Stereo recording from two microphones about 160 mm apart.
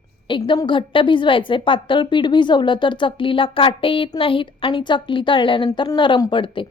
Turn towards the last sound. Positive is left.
turn(degrees=30)  # may be behind; listen again after turning